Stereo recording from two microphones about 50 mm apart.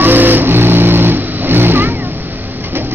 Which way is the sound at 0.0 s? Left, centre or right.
Right.